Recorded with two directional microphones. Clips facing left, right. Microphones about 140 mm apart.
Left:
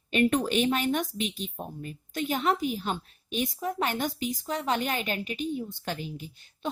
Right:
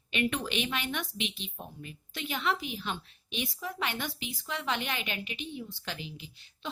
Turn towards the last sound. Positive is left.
turn(degrees=45)  # may be behind; listen again after turning